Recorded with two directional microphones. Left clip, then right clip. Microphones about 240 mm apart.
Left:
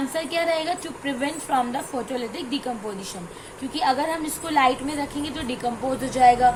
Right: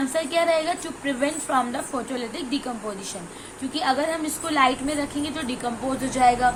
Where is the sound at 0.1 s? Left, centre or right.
Centre.